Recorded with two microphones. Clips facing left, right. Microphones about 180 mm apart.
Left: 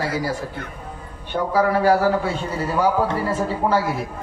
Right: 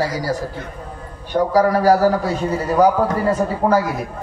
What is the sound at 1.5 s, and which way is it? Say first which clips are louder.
Speech: right 2 dB; 40° right (ahead or behind).